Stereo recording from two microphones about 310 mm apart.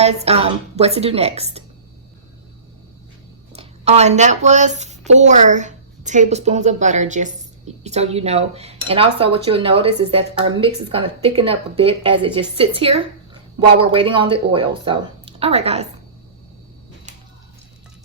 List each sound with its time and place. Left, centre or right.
0.0 s speech: centre
3.5 s a woman's voice: centre